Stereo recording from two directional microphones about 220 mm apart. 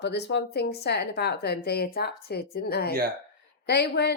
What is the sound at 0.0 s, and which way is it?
A woman's voice, 50° left (ahead or behind).